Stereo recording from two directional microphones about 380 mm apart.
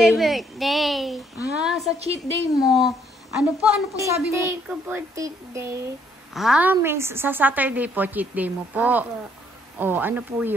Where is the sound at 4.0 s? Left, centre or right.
Centre.